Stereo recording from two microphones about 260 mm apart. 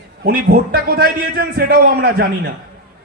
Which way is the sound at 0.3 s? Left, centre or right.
Right.